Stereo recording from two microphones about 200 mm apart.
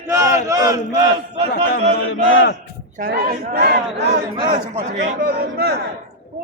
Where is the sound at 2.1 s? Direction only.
75° left (ahead or behind).